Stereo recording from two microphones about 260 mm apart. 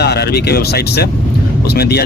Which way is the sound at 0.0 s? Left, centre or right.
Left.